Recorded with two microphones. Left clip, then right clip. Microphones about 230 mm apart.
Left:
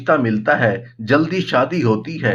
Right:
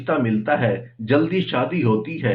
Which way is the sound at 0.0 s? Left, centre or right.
Left.